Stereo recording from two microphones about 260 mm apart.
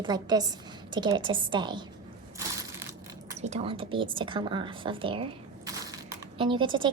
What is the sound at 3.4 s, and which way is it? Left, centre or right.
Speech, right.